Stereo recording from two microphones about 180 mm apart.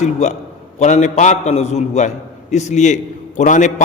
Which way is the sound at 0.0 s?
40° left (ahead or behind).